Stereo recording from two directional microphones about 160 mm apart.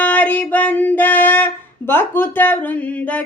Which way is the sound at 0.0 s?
10° left (ahead or behind).